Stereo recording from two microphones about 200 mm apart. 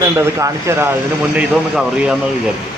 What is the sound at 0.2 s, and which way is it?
Speech, 15° right (ahead or behind).